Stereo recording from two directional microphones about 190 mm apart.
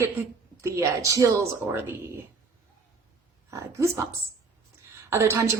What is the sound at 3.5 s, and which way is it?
Speech, 15° right (ahead or behind).